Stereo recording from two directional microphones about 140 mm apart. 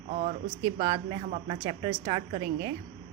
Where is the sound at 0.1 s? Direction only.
60° right (ahead or behind).